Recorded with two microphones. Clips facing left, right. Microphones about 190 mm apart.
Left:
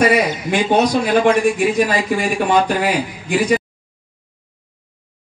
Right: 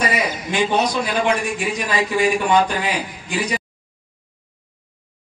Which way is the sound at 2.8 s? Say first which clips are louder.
Left 5 dB; 50° left (ahead or behind).